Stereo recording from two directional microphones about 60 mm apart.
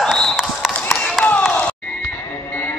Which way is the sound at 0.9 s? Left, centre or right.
Centre.